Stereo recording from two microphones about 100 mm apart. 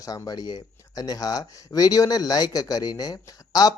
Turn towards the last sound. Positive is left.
turn(degrees=40)  # may be behind; listen again after turning